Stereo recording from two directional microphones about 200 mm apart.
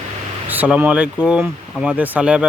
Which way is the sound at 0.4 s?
10° right (ahead or behind).